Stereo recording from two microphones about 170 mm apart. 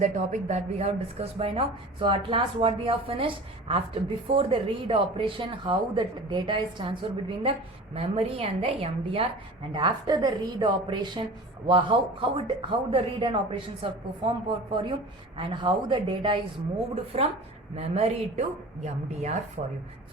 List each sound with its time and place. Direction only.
0.0 s speech: 45° right (ahead or behind)
19.6 s a woman's voice: 45° right (ahead or behind)